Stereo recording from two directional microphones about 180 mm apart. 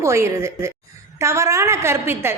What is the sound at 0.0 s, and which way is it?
A woman's voice, 15° right (ahead or behind).